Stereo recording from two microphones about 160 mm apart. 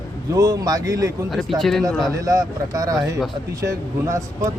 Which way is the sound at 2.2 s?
20° right (ahead or behind).